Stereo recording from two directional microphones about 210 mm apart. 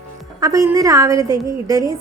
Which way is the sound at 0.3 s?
15° right (ahead or behind).